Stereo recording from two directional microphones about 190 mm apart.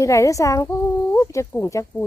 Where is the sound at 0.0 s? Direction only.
15° left (ahead or behind).